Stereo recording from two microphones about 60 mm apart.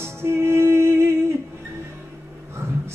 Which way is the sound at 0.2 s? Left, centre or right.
Right.